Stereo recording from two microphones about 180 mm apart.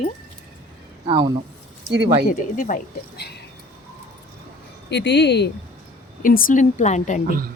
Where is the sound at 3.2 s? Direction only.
65° left (ahead or behind).